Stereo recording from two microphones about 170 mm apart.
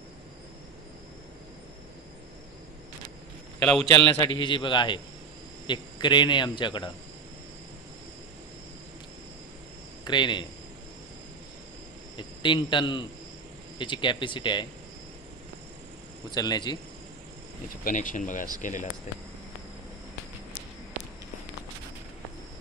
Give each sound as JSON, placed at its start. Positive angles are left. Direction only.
{"t": 3.8, "sound": "cricket", "side_deg": 20}
{"t": 10.0, "sound": "cricket", "side_deg": 25}
{"t": 12.2, "sound": "cricket", "side_deg": 30}
{"t": 16.3, "sound": "cricket", "side_deg": 25}
{"t": 17.8, "sound": "speech", "side_deg": 50}